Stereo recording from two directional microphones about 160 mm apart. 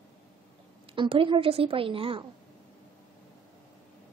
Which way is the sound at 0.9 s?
35° right (ahead or behind).